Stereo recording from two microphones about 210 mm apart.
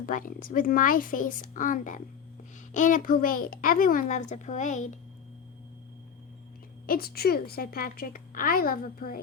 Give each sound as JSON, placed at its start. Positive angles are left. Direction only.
{"t": 0.0, "sound": "a child's voice", "side_deg": 40}
{"t": 6.8, "sound": "a woman's voice", "side_deg": 45}